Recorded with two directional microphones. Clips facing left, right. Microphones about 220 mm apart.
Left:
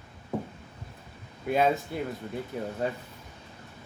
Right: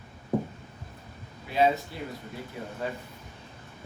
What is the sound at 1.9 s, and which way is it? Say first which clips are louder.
Speech: left 5 dB; 50° left (ahead or behind).